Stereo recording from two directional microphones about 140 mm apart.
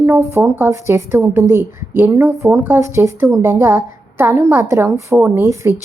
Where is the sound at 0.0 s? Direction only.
20° right (ahead or behind).